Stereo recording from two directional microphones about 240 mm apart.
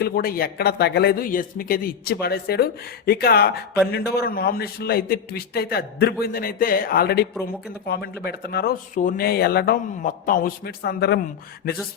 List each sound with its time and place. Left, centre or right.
0.0 s a man's voice: left